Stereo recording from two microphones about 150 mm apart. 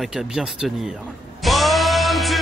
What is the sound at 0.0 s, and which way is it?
Speech, 5° right (ahead or behind).